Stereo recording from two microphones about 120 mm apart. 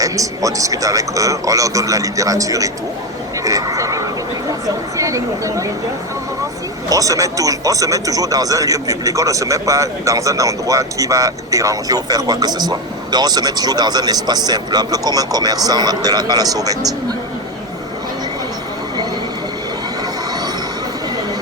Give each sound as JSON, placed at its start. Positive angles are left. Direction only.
{"t": 0.0, "sound": "a man's voice", "side_deg": -30}
{"t": 6.9, "sound": "speech", "side_deg": -30}